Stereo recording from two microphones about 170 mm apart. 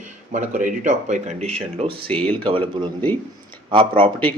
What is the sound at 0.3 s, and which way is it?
Speech, 50° right (ahead or behind).